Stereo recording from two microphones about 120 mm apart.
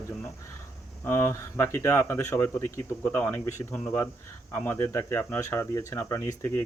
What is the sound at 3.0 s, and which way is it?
Speech, 15° left (ahead or behind).